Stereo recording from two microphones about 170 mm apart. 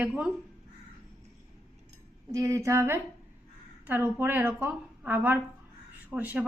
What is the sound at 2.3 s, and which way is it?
A woman's voice, 20° right (ahead or behind).